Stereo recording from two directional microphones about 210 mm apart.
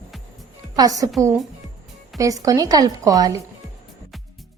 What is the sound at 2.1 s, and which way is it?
Speech, 15° right (ahead or behind).